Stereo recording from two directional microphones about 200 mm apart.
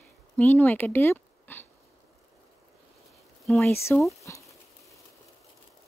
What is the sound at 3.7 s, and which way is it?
Speech, 15° left (ahead or behind).